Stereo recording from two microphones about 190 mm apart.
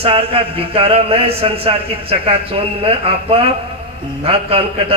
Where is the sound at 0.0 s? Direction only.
30° right (ahead or behind).